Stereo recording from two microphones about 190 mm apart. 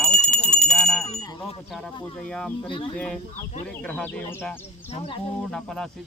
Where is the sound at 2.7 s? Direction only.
25° left (ahead or behind).